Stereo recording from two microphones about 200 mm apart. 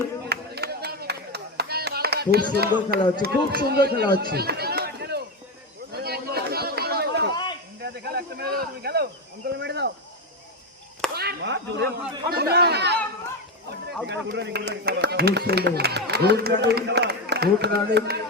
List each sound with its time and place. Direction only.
0.3 s clapping: 55° right (ahead or behind)
3.2 s a man's voice: 50° right (ahead or behind)
5.9 s a sound: 50° right (ahead or behind)
7.8 s snake: 55° right (ahead or behind)
9.6 s a sound: 60° right (ahead or behind)
11.1 s whip: 55° right (ahead or behind)
12.3 s chatter: 55° right (ahead or behind)
14.1 s speech: 60° right (ahead or behind)